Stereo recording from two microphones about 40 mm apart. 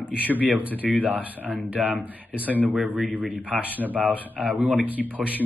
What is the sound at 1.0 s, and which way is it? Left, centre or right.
Speech, right.